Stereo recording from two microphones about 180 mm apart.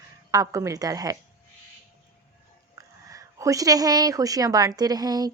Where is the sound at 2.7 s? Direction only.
20° right (ahead or behind).